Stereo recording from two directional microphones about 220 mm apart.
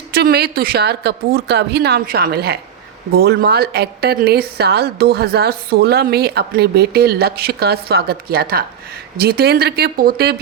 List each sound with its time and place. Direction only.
0.1 s a woman's voice: 45° right (ahead or behind)